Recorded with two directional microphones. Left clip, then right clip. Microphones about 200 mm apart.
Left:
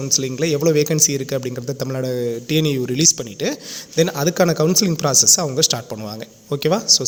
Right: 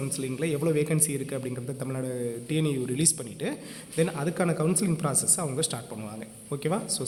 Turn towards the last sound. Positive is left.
turn(degrees=35)  # may be behind; listen again after turning